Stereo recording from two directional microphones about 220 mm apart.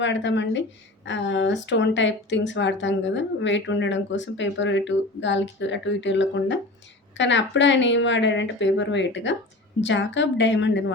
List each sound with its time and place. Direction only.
0.0 s speech: 55° left (ahead or behind)